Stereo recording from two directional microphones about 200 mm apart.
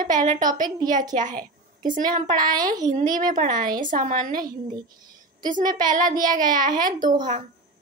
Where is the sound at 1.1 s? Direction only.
40° right (ahead or behind).